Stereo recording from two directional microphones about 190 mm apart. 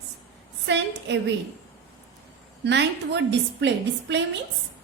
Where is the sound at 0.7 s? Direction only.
70° right (ahead or behind).